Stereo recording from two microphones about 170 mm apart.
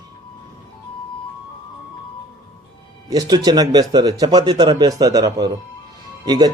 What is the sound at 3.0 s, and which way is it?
Speech, 20° right (ahead or behind).